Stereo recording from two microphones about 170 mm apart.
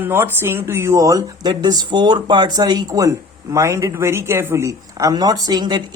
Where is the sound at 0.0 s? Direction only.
15° right (ahead or behind).